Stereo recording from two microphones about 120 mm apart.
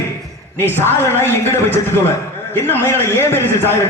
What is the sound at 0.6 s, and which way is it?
Speech, 15° left (ahead or behind).